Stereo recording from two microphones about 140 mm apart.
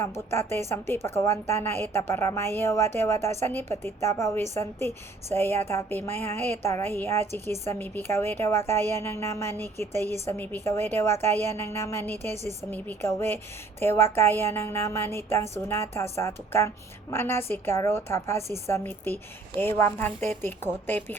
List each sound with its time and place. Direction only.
0.0 s a woman's voice: 20° left (ahead or behind)
12.3 s a woman's voice: 55° right (ahead or behind)
12.7 s a woman's voice: 15° left (ahead or behind)